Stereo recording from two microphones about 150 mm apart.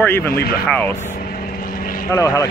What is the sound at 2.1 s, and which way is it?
Speech, 20° left (ahead or behind).